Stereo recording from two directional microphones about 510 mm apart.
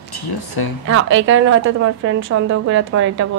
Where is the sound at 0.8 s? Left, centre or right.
Right.